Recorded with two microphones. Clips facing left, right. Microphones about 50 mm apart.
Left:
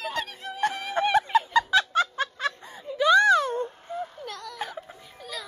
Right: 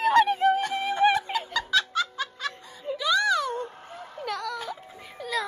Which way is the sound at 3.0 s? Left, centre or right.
Left.